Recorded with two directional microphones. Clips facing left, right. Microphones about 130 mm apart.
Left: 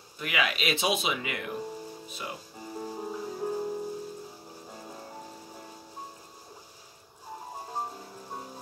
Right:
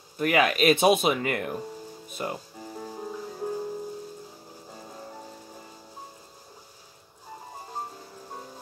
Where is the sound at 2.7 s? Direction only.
10° left (ahead or behind).